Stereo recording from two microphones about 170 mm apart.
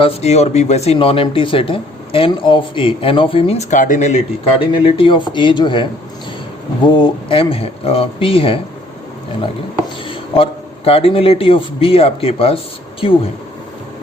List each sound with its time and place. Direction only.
0.0 s speech: 40° left (ahead or behind)
4.7 s speech: 30° left (ahead or behind)
10.1 s a man's voice: 35° left (ahead or behind)